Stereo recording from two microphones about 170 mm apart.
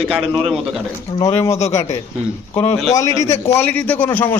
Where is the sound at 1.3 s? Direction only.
15° left (ahead or behind).